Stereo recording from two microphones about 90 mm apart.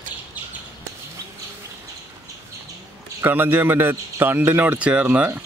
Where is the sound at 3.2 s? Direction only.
20° right (ahead or behind).